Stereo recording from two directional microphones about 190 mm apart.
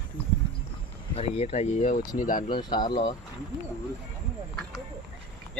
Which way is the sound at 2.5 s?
25° left (ahead or behind).